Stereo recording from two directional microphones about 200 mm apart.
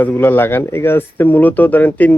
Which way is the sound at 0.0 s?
10° left (ahead or behind).